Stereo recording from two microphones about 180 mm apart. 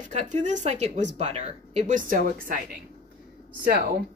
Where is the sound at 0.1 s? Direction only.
40° right (ahead or behind).